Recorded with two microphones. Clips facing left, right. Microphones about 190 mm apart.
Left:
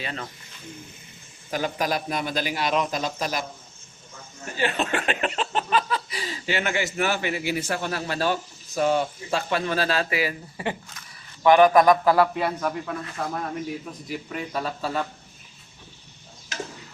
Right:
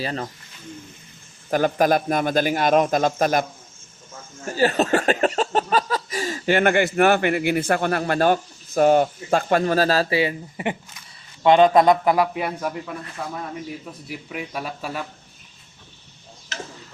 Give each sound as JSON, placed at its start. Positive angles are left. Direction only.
{"t": 0.0, "sound": "speech", "side_deg": -35}
{"t": 1.5, "sound": "speech", "side_deg": -50}
{"t": 4.4, "sound": "a man's voice", "side_deg": -40}
{"t": 14.1, "sound": "speech", "side_deg": -10}